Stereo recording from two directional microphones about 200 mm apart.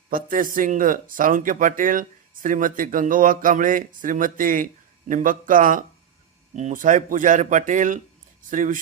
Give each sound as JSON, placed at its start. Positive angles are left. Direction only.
{"t": 0.1, "sound": "speech", "side_deg": -45}